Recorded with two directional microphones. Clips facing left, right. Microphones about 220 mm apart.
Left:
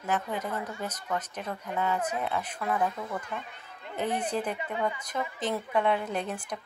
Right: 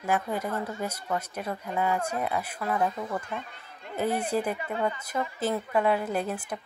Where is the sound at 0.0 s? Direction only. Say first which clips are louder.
Right 3 dB; 10° right (ahead or behind).